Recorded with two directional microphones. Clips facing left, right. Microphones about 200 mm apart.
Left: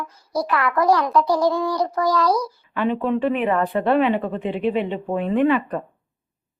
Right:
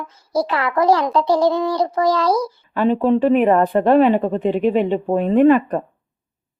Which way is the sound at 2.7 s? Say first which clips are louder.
Right 5 dB; 35° right (ahead or behind).